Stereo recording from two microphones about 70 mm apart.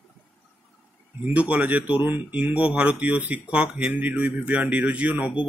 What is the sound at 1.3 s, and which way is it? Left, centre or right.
Speech, right.